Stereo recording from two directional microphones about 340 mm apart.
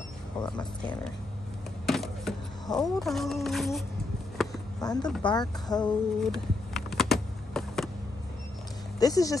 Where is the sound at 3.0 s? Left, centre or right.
Centre.